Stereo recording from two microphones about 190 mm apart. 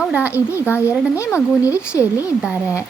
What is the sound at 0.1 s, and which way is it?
Speech, 10° right (ahead or behind).